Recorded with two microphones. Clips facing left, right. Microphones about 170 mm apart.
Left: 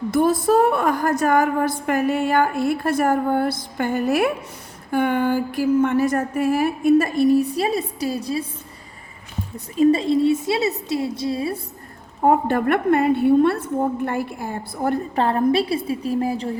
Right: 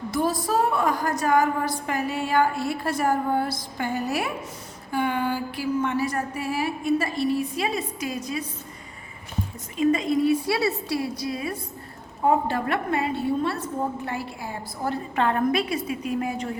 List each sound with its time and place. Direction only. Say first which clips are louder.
0.1 s a sound: left 7 dB; 55° left (ahead or behind)
0.4 s a woman's voice: left 6 dB; 55° left (ahead or behind); by 8.4 s 30° left (ahead or behind)
9.7 s a woman's voice: left 5 dB; 35° left (ahead or behind)
12.2 s a woman's voice: left 5 dB; 55° left (ahead or behind)
15.1 s a woman's voice: left 3 dB; 35° left (ahead or behind)